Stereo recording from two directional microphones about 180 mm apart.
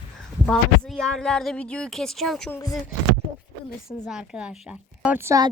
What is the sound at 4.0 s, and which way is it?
Speech, 5° right (ahead or behind).